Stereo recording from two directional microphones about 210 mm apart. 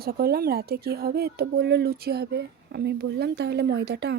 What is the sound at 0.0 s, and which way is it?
Speech, 45° right (ahead or behind).